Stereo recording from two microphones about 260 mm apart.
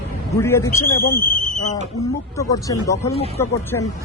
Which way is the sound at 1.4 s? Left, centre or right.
Left.